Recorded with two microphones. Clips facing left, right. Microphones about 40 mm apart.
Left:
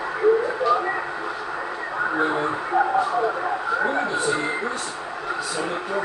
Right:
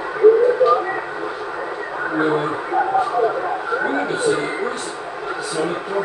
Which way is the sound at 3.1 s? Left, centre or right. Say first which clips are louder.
Right 4 dB; centre.